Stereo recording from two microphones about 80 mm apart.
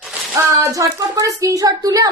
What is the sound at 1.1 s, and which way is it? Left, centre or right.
Speech, right.